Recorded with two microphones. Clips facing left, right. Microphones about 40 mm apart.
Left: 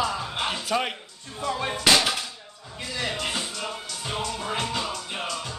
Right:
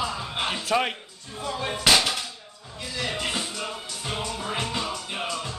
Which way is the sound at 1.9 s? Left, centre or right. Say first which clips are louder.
Even; centre.